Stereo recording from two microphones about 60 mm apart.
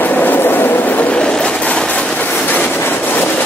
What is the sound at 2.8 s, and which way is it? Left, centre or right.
Train, left.